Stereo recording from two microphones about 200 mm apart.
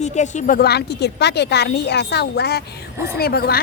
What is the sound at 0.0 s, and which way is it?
A woman's voice, 35° left (ahead or behind).